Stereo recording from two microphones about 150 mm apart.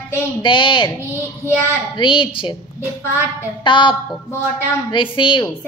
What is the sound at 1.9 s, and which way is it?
Speech, 35° left (ahead or behind).